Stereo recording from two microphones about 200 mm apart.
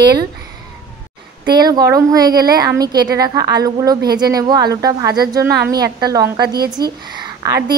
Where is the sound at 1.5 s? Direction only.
20° right (ahead or behind).